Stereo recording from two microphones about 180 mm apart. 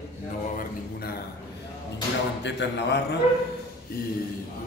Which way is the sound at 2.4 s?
70° left (ahead or behind).